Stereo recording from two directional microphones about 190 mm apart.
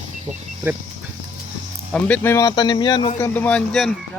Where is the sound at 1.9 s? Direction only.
10° left (ahead or behind).